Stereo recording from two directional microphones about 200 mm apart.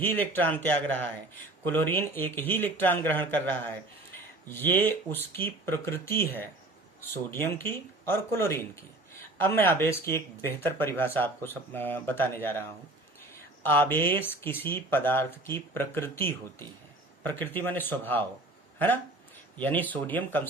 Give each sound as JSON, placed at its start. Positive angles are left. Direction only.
{"t": 0.0, "sound": "speech", "side_deg": 10}
{"t": 19.5, "sound": "speech", "side_deg": 10}